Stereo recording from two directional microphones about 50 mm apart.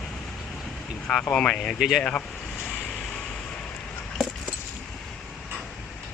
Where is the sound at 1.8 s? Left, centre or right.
Centre.